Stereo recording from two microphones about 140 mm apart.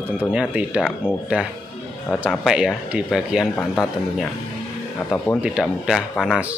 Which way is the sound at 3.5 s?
15° left (ahead or behind).